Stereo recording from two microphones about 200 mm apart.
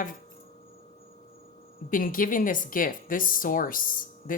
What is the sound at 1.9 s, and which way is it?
Speech, 45° left (ahead or behind).